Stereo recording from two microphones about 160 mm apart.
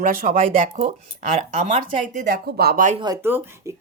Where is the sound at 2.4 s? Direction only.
75° right (ahead or behind).